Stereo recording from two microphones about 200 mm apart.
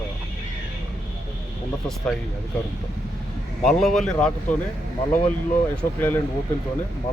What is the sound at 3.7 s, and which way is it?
Speech, centre (ahead or behind).